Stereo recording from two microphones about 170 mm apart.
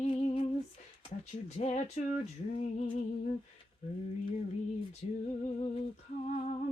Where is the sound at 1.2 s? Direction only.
40° left (ahead or behind).